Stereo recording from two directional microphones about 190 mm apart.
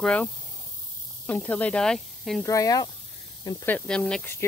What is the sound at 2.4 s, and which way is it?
Speech, 15° left (ahead or behind).